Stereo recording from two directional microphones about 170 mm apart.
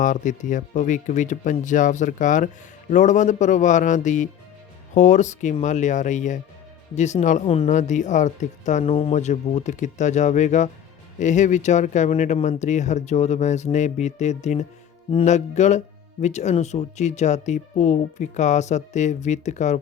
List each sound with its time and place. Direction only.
0.0 s speech: 50° left (ahead or behind)